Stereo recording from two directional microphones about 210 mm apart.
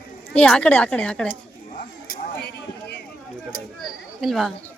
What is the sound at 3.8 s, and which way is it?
Chatter, centre (ahead or behind).